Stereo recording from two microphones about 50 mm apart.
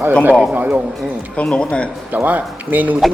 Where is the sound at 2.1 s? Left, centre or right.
Right.